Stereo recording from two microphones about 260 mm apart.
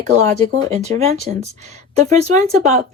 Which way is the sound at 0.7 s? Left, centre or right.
Right.